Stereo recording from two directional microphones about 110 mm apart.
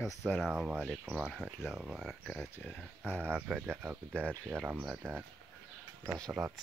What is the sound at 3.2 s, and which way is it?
Speech, 15° right (ahead or behind).